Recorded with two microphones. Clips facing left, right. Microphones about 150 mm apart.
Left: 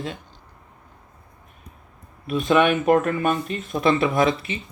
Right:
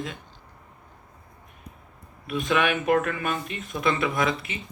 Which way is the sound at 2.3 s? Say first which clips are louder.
Left 6 dB; 30° left (ahead or behind).